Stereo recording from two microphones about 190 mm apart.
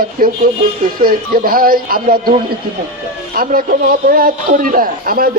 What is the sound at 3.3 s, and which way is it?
A man's voice, 50° right (ahead or behind).